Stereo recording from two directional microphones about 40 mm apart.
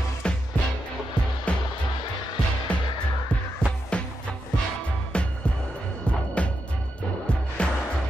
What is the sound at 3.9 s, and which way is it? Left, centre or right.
Music, left.